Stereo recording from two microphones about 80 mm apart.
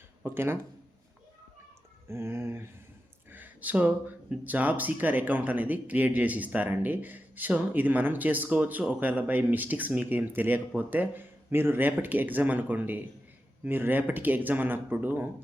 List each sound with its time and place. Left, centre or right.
0.3 s speech: right
2.0 s speech: right